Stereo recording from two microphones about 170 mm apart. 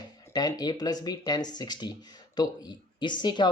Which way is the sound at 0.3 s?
25° left (ahead or behind).